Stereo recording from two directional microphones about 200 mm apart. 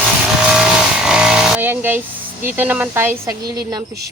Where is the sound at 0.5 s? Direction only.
5° right (ahead or behind).